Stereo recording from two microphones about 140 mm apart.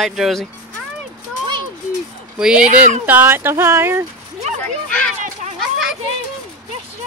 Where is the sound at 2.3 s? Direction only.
5° right (ahead or behind).